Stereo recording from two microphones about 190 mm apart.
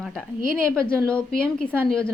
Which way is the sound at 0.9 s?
5° left (ahead or behind).